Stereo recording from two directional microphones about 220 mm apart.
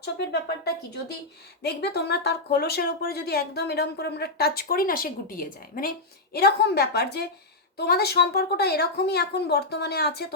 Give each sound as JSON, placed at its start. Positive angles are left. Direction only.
{"t": 0.0, "sound": "speech", "side_deg": 50}